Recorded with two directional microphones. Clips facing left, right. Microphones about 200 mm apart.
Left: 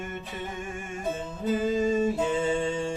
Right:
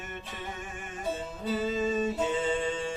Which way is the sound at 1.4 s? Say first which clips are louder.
Left 5 dB; 50° left (ahead or behind).